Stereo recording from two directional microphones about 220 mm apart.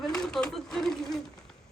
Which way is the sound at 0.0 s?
5° left (ahead or behind).